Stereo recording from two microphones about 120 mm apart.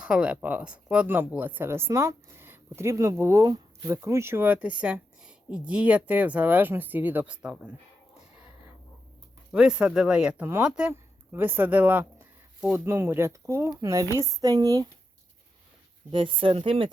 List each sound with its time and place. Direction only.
0.0 s speech: 10° right (ahead or behind)
9.5 s speech: 10° right (ahead or behind); by 14.8 s 30° right (ahead or behind)
16.1 s speech: 45° right (ahead or behind)